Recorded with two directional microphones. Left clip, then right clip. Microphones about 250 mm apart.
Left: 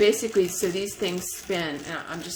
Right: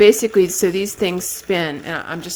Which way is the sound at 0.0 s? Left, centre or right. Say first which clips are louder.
Right 9 dB; right.